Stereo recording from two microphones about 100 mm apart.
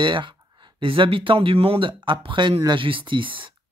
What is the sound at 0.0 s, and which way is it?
Speech, 55° right (ahead or behind).